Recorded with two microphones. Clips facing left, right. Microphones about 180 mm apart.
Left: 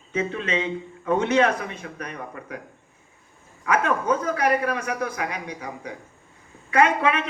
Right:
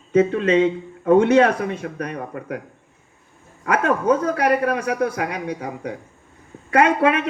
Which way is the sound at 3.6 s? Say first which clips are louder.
Right 4 dB; 55° right (ahead or behind).